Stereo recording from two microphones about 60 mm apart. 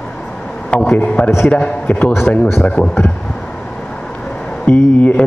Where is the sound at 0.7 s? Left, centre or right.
Centre.